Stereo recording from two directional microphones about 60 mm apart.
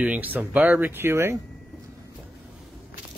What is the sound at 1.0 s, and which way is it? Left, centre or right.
Speech, right.